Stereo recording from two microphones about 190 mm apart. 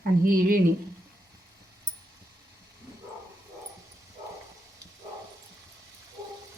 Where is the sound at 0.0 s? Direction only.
50° right (ahead or behind).